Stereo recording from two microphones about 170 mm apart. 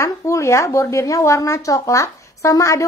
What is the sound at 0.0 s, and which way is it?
A woman's voice, 15° left (ahead or behind).